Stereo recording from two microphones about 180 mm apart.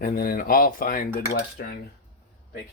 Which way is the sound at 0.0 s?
55° left (ahead or behind).